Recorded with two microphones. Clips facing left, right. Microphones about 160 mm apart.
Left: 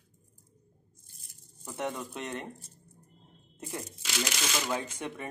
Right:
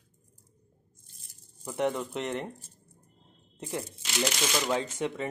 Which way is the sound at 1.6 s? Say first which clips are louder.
Right 6 dB; 20° right (ahead or behind).